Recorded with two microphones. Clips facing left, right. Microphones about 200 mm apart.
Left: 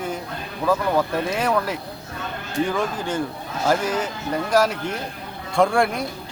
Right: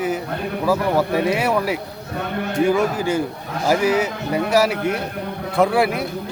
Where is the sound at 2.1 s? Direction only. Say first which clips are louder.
Right 5 dB; 60° right (ahead or behind).